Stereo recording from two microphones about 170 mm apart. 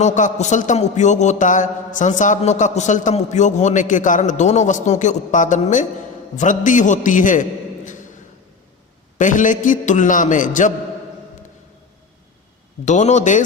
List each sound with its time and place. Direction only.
0.0 s a man's voice: 45° left (ahead or behind)
9.1 s a man's voice: 50° left (ahead or behind)
12.8 s a man's voice: 45° left (ahead or behind)